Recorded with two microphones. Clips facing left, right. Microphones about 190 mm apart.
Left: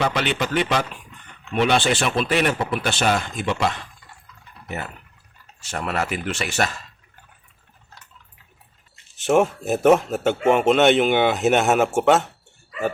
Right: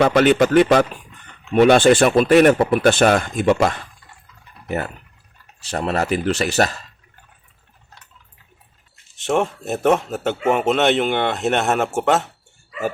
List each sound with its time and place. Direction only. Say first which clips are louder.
0.0 s speech: right 9 dB; 45° right (ahead or behind)
5.7 s speech: right 5 dB; 35° right (ahead or behind)
9.1 s a man's voice: left 2 dB; centre (ahead or behind)